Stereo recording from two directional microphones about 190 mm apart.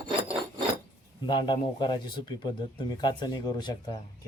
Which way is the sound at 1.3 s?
25° left (ahead or behind).